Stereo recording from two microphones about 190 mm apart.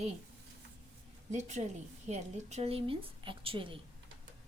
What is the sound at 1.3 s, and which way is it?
A woman's voice, 40° right (ahead or behind).